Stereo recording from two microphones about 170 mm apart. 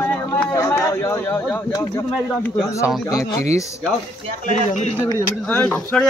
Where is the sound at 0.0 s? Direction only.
15° left (ahead or behind).